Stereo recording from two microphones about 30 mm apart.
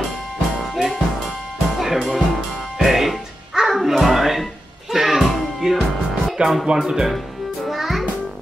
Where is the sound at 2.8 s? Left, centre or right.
Centre.